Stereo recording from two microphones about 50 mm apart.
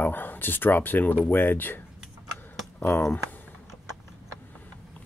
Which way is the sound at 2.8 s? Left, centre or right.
Left.